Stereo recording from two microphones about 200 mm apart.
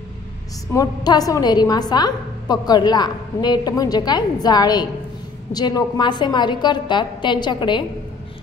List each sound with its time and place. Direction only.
0.7 s a woman's voice: 20° left (ahead or behind)